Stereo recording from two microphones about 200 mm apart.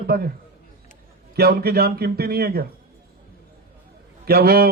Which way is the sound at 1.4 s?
50° right (ahead or behind).